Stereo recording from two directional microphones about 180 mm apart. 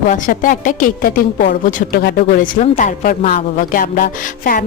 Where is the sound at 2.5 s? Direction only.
45° left (ahead or behind).